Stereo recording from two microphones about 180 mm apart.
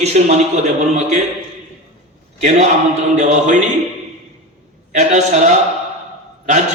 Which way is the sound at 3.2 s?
40° right (ahead or behind).